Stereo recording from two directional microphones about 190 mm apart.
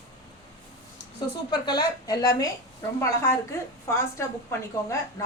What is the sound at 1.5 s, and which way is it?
A woman's voice, 25° left (ahead or behind).